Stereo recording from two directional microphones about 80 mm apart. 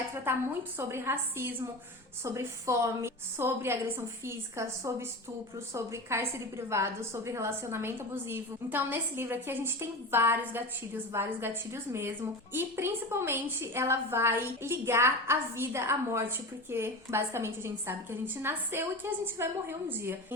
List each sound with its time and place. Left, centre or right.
0.8 s a woman's voice: right
2.2 s a woman's voice: right
5.7 s a woman's voice: right